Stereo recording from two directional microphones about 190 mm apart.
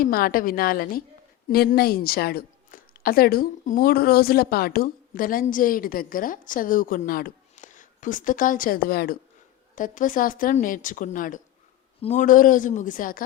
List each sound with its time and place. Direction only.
0.0 s a woman's voice: 50° left (ahead or behind)